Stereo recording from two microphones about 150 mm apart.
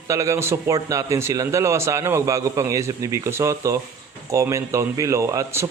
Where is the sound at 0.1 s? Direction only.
20° right (ahead or behind).